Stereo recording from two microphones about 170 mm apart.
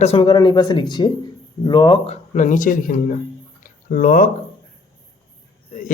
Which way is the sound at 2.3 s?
45° left (ahead or behind).